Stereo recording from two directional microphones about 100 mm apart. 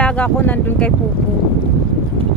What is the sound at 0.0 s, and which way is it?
Speech, 15° left (ahead or behind).